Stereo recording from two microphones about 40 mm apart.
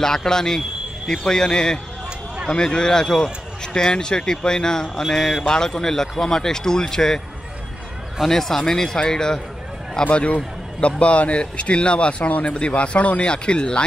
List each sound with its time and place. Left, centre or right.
0.0 s a man's voice: centre
8.2 s a man's voice: centre
10.1 s a man's voice: left